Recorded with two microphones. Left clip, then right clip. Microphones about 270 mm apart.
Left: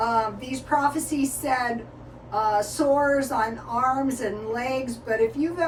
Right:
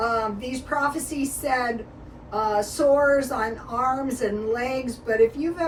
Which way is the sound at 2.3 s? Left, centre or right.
Centre.